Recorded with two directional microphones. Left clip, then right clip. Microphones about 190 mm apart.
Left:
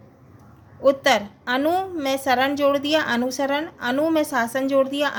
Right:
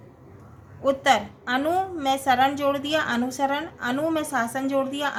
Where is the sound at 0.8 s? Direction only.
45° left (ahead or behind).